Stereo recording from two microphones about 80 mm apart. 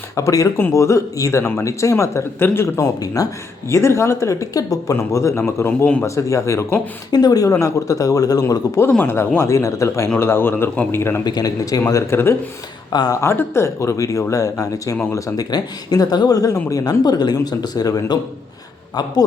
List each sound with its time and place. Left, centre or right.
0.2 s a man's voice: left
3.7 s speech: left
7.1 s a man's voice: left
9.0 s a man's voice: left
11.3 s a man's voice: left
12.1 s speech: left
12.9 s speech: left
13.2 s speech: left
15.4 s speech: left